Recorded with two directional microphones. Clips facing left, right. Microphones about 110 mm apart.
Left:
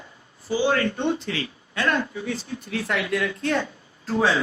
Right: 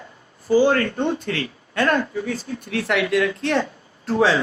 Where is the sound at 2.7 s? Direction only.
70° right (ahead or behind).